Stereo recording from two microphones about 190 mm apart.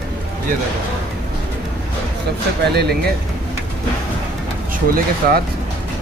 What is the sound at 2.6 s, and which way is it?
Speech, 60° right (ahead or behind).